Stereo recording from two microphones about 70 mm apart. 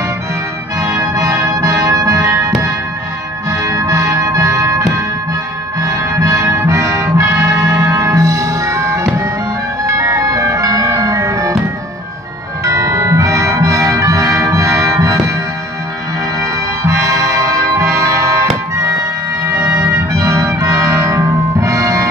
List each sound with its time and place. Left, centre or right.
1.1 s music: right
9.8 s ice cream truck: right
11.0 s music: right
12.6 s music: right
16.3 s music: right